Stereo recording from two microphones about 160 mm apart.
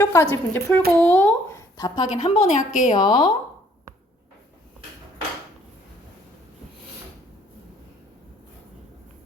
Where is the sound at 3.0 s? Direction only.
25° left (ahead or behind).